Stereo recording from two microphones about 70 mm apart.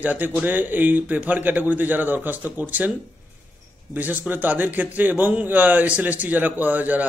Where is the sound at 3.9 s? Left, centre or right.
Right.